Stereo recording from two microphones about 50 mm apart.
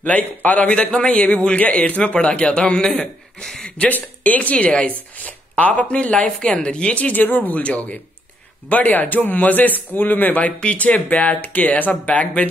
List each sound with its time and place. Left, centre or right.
0.2 s speech: left
0.7 s speech: centre
3.9 s speech: left
7.1 s speech: left